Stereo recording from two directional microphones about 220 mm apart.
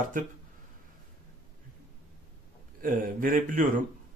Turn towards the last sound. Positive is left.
turn(degrees=-40)  # may be behind; listen again after turning